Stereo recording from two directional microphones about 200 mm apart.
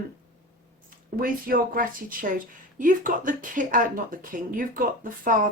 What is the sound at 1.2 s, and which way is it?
A woman's voice, 45° right (ahead or behind).